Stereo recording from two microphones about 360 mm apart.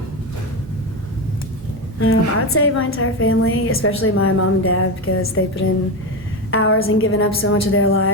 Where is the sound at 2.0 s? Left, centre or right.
Left.